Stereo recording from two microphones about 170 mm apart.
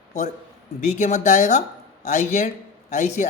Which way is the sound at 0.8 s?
45° left (ahead or behind).